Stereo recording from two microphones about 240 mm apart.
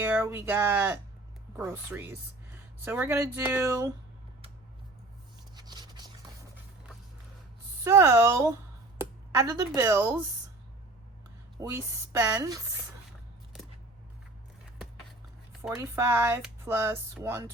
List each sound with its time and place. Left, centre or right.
0.0 s speech: centre
5.5 s a sound: centre
7.9 s speech: centre
11.5 s speech: centre
15.7 s speech: centre